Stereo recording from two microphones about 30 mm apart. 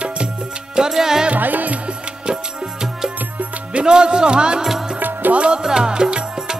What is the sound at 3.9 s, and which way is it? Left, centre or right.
Music, right.